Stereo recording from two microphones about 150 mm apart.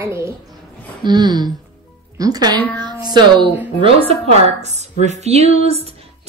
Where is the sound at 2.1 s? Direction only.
25° right (ahead or behind).